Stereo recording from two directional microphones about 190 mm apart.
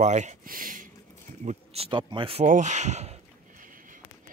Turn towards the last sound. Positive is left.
turn(degrees=-35)  # may be behind; listen again after turning